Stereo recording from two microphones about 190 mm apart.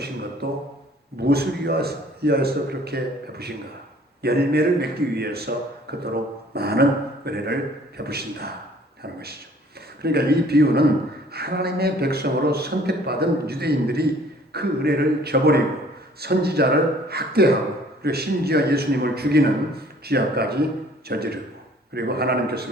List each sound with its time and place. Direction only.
0.4 s a man's voice: 60° right (ahead or behind)